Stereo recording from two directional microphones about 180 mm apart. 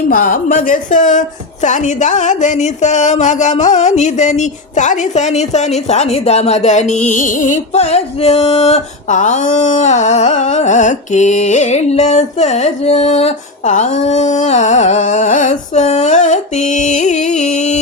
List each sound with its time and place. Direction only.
0.1 s speech: 50° left (ahead or behind)